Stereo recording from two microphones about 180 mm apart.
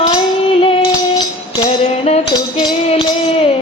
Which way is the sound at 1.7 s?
35° left (ahead or behind).